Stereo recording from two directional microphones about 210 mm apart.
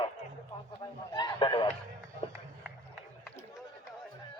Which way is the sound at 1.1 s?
20° left (ahead or behind).